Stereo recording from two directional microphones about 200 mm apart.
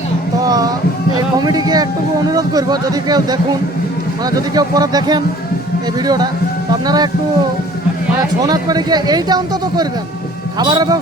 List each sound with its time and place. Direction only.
0.4 s a sound: 20° right (ahead or behind)
1.4 s speech: 20° right (ahead or behind)
8.4 s speech: 20° right (ahead or behind)